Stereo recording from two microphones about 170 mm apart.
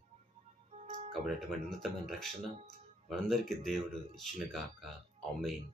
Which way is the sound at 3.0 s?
Centre (ahead or behind).